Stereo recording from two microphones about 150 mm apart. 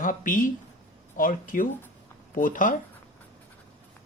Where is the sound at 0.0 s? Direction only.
60° left (ahead or behind).